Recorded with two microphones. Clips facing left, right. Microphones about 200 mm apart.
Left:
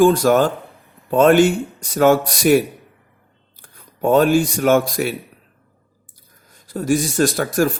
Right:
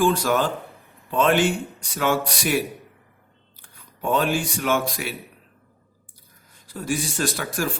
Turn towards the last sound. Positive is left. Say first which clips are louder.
# left 9 dB
turn(degrees=40)  # may be behind; listen again after turning